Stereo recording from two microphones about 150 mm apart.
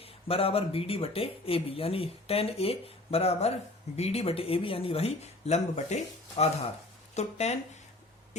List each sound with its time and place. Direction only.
0.0 s speech: 40° left (ahead or behind)